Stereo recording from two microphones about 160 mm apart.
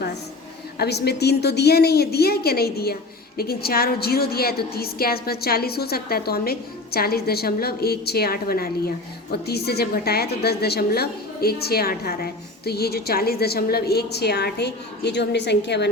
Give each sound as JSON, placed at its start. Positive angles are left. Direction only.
{"t": 0.8, "sound": "a woman's voice", "side_deg": 90}
{"t": 9.3, "sound": "a woman's voice", "side_deg": 90}